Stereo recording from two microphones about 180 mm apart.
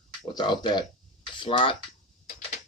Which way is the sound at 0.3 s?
25° left (ahead or behind).